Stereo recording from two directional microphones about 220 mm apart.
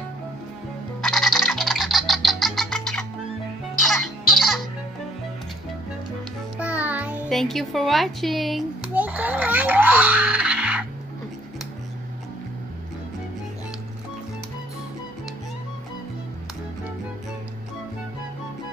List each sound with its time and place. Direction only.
1.0 s music: centre (ahead or behind)
6.6 s a child's voice: 5° right (ahead or behind)